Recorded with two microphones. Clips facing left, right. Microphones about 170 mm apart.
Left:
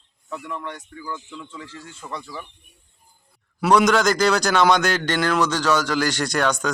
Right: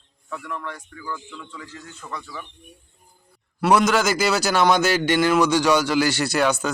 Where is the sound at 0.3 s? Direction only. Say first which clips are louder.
Left 1 dB; 20° left (ahead or behind).